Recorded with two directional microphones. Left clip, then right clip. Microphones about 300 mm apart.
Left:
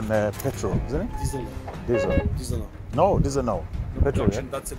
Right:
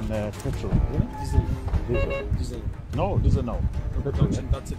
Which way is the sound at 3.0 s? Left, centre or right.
Left.